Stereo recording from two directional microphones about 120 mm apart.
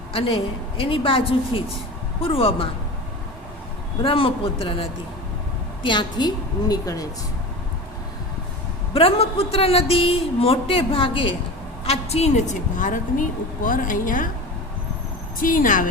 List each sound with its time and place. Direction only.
0.1 s a woman's voice: 50° left (ahead or behind)
4.0 s a woman's voice: 50° left (ahead or behind); by 7.0 s 30° left (ahead or behind)
8.9 s a woman's voice: 50° left (ahead or behind)
11.9 s a woman's voice: 60° left (ahead or behind); by 14.3 s 90° left
15.4 s a woman's voice: 90° left